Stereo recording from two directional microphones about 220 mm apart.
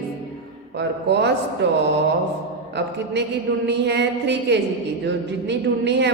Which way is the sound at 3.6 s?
50° right (ahead or behind).